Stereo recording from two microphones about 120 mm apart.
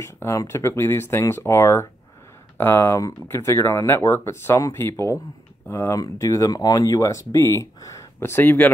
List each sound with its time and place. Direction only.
0.0 s speech: 25° left (ahead or behind)